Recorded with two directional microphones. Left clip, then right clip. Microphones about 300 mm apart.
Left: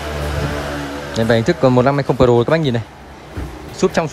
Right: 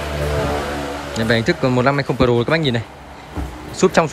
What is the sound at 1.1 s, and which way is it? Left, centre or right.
Speech, centre.